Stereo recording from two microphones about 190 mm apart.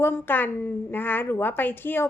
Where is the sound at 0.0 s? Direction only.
10° left (ahead or behind).